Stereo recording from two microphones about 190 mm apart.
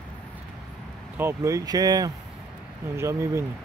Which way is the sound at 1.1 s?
15° right (ahead or behind).